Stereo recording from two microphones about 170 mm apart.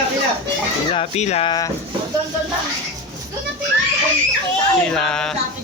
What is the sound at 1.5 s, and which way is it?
Speech, 20° left (ahead or behind).